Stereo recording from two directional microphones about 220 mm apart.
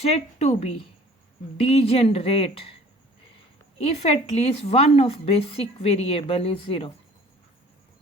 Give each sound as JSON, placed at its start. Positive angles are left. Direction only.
{"t": 0.0, "sound": "a woman's voice", "side_deg": 30}
{"t": 3.9, "sound": "a woman's voice", "side_deg": 30}